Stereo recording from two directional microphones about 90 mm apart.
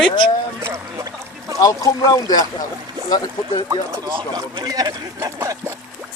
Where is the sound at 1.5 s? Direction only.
40° left (ahead or behind).